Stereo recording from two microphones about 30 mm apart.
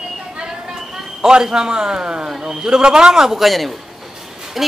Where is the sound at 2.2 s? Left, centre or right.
Centre.